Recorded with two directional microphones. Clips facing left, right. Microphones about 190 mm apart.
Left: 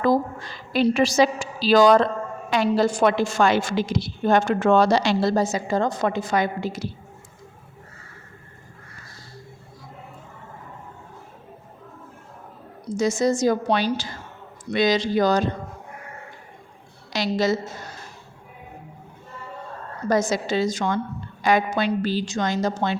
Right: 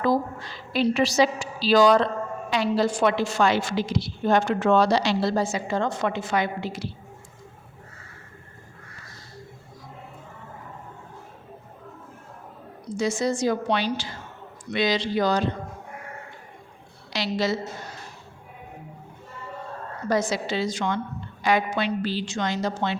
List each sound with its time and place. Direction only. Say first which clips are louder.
0.0 s a woman's voice: left 3 dB; 50° left (ahead or behind)
13.0 s a woman's voice: left 4 dB; 45° left (ahead or behind)
17.1 s a woman's voice: left 3 dB; 45° left (ahead or behind)
20.1 s a woman's voice: left 3 dB; 45° left (ahead or behind)